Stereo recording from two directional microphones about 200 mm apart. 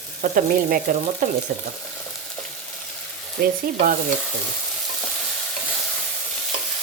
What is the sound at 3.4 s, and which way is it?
Frying, 55° right (ahead or behind).